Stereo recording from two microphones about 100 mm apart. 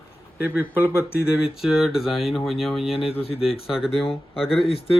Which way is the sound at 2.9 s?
70° left (ahead or behind).